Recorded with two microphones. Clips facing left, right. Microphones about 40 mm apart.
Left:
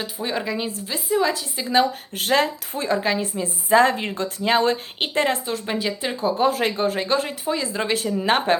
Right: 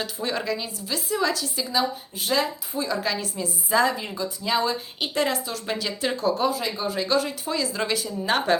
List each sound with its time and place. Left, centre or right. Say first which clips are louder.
0.0 s a woman's voice: left 1 dB; centre
1.7 s a woman's voice: left 7 dB; left
5.6 s a woman's voice: even; left
6.5 s speech: left 5 dB; left
7.0 s a woman's voice: left 1 dB; left